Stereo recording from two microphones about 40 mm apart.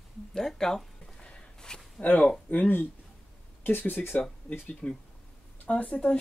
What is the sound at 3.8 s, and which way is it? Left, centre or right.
Speech, left.